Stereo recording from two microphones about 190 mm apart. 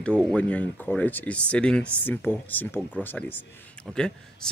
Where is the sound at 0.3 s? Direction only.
5° left (ahead or behind).